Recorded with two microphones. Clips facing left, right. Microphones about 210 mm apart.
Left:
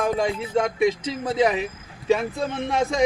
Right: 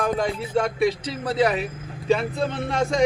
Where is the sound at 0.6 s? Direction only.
20° left (ahead or behind).